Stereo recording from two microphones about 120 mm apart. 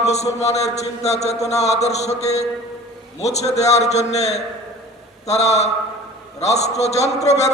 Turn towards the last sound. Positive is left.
turn(degrees=65)  # may be behind; listen again after turning